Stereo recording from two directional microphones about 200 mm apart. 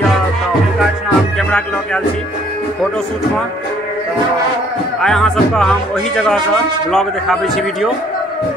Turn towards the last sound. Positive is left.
turn(degrees=0)  # may be behind; listen again after turning